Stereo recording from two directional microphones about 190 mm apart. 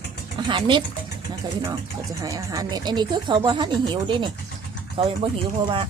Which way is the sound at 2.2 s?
20° right (ahead or behind).